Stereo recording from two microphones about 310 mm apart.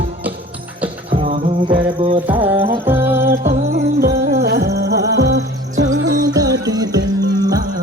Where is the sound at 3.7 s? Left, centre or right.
Right.